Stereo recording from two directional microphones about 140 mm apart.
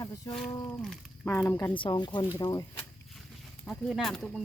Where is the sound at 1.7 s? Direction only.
35° left (ahead or behind).